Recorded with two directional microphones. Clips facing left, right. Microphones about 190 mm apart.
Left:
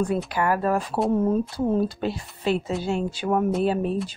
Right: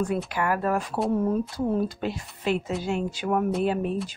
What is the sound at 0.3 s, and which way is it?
Speech, 35° left (ahead or behind).